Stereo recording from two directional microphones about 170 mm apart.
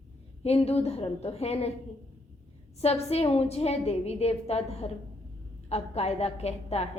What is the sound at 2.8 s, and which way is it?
A woman's voice, 40° left (ahead or behind).